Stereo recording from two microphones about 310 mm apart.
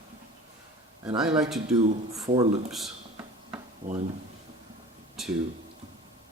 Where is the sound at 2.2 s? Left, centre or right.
Centre.